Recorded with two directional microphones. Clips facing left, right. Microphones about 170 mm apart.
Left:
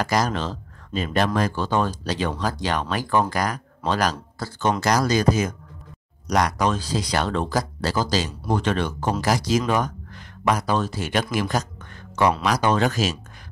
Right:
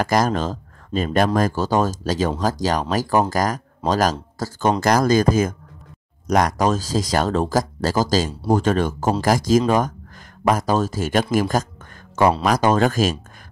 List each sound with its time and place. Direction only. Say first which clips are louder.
0.0 s speech: right 4 dB; 45° right (ahead or behind)